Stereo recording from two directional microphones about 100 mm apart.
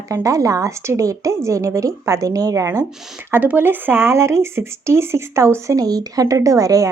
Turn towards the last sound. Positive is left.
turn(degrees=-35)  # may be behind; listen again after turning